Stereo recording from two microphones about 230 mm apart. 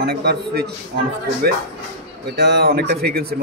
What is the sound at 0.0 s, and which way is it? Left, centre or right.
Speech, right.